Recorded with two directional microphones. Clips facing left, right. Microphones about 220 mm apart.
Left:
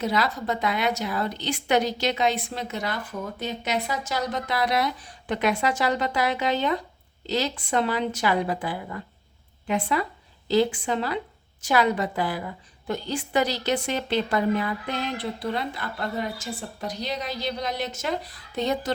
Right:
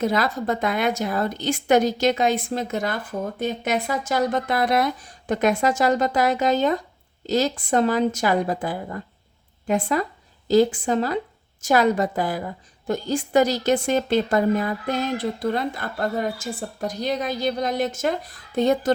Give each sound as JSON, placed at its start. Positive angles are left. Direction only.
{"t": 0.0, "sound": "a woman's voice", "side_deg": -50}